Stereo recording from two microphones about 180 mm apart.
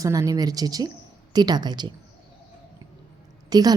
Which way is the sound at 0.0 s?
20° right (ahead or behind).